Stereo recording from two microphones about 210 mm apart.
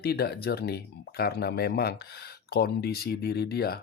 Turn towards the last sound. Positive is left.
turn(degrees=50)  # may be behind; listen again after turning